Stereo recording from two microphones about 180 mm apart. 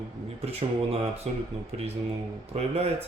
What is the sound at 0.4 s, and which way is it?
Speech, 35° right (ahead or behind).